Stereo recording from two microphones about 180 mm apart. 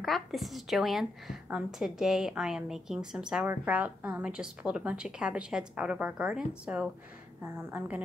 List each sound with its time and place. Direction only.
0.0 s a woman's voice: centre (ahead or behind)